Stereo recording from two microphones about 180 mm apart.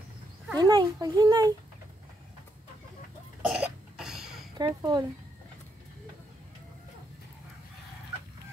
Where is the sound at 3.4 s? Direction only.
5° right (ahead or behind).